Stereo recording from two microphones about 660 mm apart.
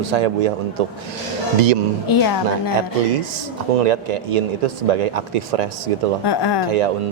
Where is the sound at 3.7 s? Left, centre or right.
Right.